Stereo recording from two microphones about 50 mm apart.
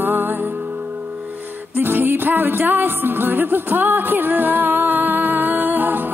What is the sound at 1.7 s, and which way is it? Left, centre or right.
Music, right.